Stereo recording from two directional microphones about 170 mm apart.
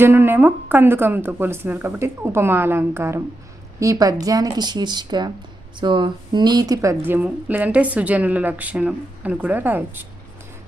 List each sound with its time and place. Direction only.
0.0 s speech: 10° right (ahead or behind)